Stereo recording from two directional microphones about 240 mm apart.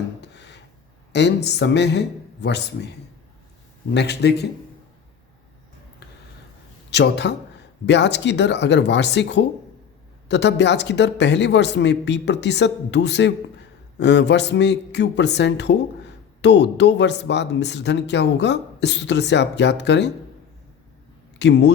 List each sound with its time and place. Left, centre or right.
0.2 s a sound: left
1.1 s speech: left
3.9 s speech: left
6.9 s speech: left
21.3 s speech: left